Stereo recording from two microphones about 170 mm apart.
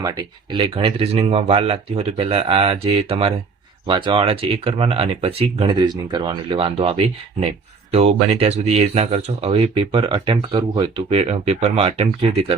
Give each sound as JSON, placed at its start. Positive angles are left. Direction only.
{"t": 0.0, "sound": "speech", "side_deg": -25}